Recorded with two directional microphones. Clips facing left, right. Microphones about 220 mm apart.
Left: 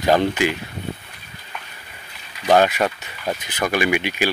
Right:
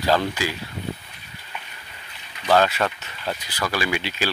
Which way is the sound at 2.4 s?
15° left (ahead or behind).